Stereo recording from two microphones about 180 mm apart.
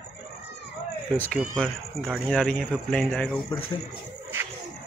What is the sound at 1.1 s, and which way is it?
Speech, 10° left (ahead or behind).